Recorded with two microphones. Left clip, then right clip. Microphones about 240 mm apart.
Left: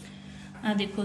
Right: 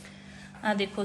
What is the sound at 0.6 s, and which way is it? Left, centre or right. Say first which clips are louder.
Speech: right 2 dB; centre.